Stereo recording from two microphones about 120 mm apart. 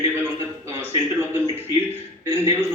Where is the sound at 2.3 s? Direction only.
20° right (ahead or behind).